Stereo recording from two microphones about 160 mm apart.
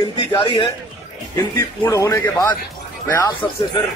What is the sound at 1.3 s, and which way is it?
Speech, 20° left (ahead or behind).